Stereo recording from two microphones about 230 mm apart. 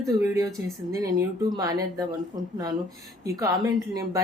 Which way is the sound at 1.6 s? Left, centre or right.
Centre.